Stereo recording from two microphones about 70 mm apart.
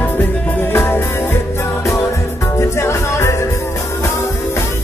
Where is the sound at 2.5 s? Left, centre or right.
Left.